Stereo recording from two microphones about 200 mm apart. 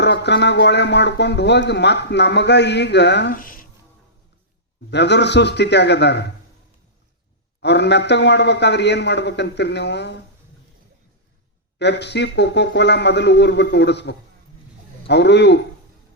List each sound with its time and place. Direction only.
0.0 s speech: 60° left (ahead or behind)
4.9 s speech: 60° left (ahead or behind)
7.6 s speech: 60° left (ahead or behind)
11.8 s speech: 60° left (ahead or behind)